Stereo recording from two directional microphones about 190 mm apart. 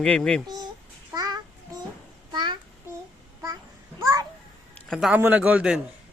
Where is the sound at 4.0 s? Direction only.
15° right (ahead or behind).